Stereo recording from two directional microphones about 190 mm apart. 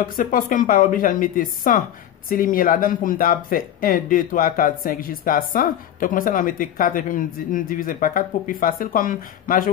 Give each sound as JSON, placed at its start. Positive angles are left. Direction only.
{"t": 0.0, "sound": "speech", "side_deg": 45}